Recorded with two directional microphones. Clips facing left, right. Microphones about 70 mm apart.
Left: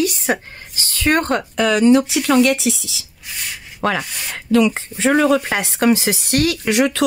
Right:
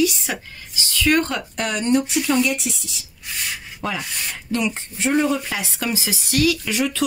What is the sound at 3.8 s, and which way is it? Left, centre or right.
Speech, left.